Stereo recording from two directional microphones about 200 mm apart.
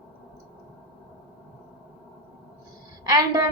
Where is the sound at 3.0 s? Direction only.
20° right (ahead or behind).